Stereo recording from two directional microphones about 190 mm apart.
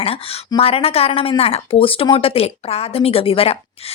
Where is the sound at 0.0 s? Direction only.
30° left (ahead or behind).